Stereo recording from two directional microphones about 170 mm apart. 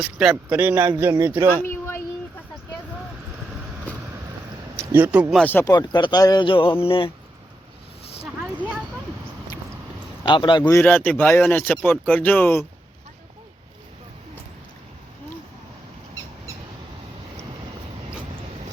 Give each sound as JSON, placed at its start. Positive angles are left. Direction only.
{"t": 0.0, "sound": "speech", "side_deg": -5}
{"t": 4.8, "sound": "speech", "side_deg": -10}
{"t": 5.4, "sound": "speech", "side_deg": 10}
{"t": 5.7, "sound": "speech", "side_deg": 25}
{"t": 10.2, "sound": "speech", "side_deg": 30}
{"t": 10.6, "sound": "speech", "side_deg": 10}